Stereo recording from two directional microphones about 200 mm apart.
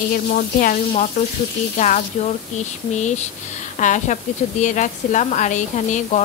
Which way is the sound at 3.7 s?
40° left (ahead or behind).